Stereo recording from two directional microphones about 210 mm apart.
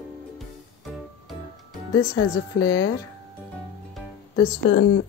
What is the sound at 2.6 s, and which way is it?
Speech, 20° left (ahead or behind).